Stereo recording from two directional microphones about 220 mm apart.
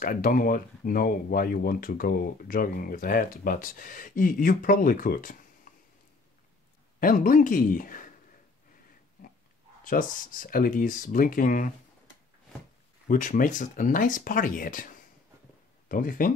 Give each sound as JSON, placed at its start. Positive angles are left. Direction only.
{"t": 0.0, "sound": "speech", "side_deg": 40}
{"t": 5.7, "sound": "a sound", "side_deg": 35}
{"t": 7.0, "sound": "speech", "side_deg": 40}
{"t": 9.8, "sound": "speech", "side_deg": 40}
{"t": 13.1, "sound": "speech", "side_deg": 35}